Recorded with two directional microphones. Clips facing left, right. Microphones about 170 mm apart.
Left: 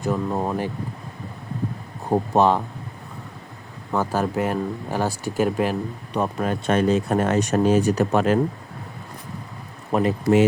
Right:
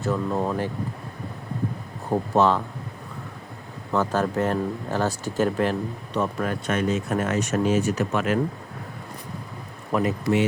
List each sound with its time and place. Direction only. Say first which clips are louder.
0.0 s speech: left 1 dB; 15° left (ahead or behind)
2.3 s speech: left 1 dB; 15° left (ahead or behind)
3.9 s speech: even; 10° left (ahead or behind)
6.1 s speech: left 2 dB; 25° left (ahead or behind)
9.9 s speech: left 3 dB; 30° left (ahead or behind)